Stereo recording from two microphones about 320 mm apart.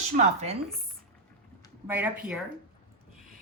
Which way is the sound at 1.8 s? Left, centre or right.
Centre.